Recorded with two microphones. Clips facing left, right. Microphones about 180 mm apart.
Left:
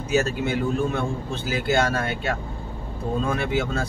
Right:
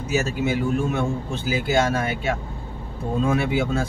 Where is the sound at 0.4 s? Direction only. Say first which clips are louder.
Right 1 dB; 5° right (ahead or behind).